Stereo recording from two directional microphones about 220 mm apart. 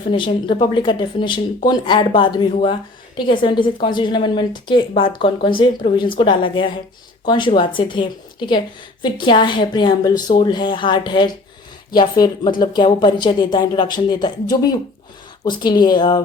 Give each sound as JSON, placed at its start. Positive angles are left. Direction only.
{"t": 0.1, "sound": "a woman's voice", "side_deg": 20}